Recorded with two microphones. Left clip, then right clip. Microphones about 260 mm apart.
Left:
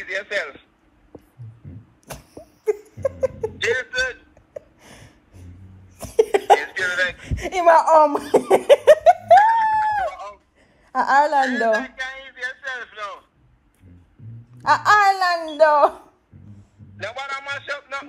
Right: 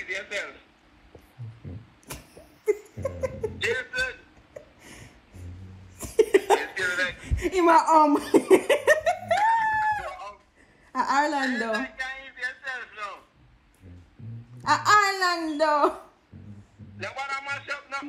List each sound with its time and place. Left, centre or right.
0.0 s a man's voice: left
2.6 s a sound: left
5.9 s laughter: left
10.9 s a sound: left
14.6 s speech: left
17.0 s music: left